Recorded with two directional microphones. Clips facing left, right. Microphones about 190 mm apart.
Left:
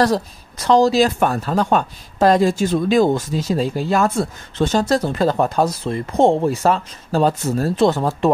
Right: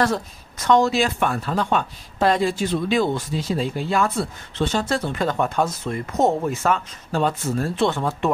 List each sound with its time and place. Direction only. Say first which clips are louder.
0.7 s speech: left 4 dB; 35° left (ahead or behind)